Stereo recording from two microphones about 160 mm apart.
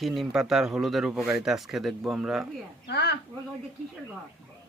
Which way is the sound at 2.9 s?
90° left.